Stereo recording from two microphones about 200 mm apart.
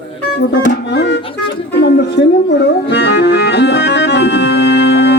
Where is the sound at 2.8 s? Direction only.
60° left (ahead or behind).